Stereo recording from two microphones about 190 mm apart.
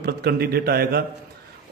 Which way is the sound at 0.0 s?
55° right (ahead or behind).